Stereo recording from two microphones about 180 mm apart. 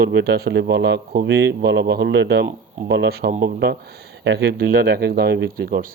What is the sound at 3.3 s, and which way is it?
Speech, 45° right (ahead or behind).